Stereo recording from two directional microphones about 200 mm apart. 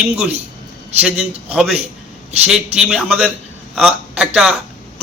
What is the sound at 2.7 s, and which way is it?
A man's voice, 5° right (ahead or behind).